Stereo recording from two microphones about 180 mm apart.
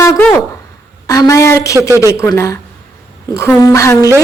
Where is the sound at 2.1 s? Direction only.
15° left (ahead or behind).